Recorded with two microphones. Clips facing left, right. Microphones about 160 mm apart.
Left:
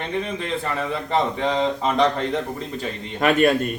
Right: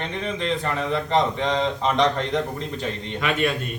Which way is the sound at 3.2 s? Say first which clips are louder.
Left 7 dB; 50° left (ahead or behind).